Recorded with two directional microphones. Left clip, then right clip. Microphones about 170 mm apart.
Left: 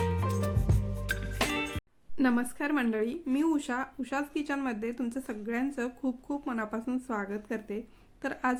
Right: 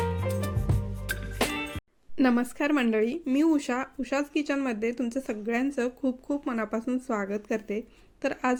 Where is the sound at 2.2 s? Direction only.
30° right (ahead or behind).